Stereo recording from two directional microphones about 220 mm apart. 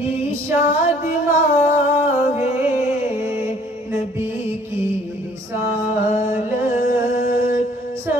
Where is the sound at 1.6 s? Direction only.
30° left (ahead or behind).